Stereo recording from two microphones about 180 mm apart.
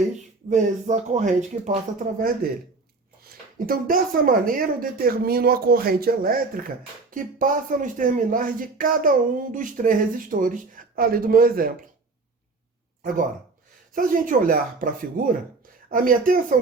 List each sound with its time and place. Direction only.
0.5 s speech: 45° right (ahead or behind)
13.9 s speech: 50° right (ahead or behind)